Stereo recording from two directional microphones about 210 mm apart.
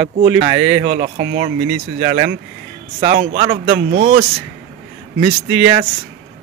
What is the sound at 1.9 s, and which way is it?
Speech, 30° right (ahead or behind).